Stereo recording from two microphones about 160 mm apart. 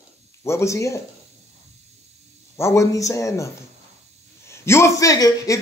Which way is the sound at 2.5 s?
15° left (ahead or behind).